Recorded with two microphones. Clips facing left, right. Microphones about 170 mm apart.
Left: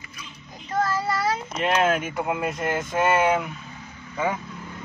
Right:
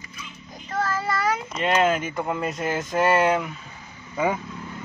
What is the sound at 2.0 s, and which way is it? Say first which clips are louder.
Speech: even; 5° left (ahead or behind).